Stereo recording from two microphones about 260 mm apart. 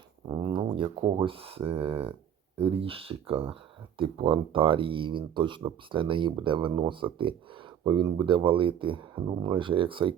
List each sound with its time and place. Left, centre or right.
0.3 s speech: centre